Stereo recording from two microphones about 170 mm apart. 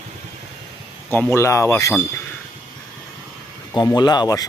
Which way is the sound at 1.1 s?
15° left (ahead or behind).